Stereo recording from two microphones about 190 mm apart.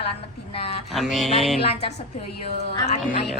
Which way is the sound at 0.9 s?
Centre (ahead or behind).